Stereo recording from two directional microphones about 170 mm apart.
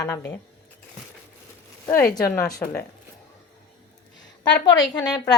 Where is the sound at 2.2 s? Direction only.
20° left (ahead or behind).